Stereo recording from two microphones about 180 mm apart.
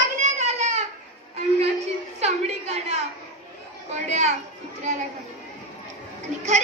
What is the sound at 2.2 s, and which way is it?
Speech, 35° right (ahead or behind).